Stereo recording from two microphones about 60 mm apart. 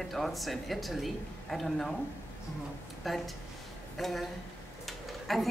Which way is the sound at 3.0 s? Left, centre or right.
Centre.